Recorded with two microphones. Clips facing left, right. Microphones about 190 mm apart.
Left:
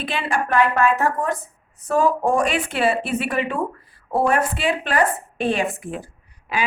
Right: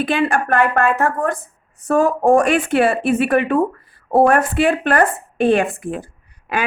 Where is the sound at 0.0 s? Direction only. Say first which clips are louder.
Right 7 dB; 50° right (ahead or behind).